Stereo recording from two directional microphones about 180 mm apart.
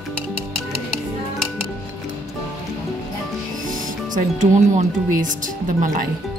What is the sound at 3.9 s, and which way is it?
Speech, 45° right (ahead or behind).